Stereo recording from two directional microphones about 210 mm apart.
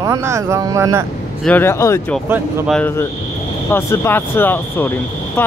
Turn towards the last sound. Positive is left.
turn(degrees=10)  # may be behind; listen again after turning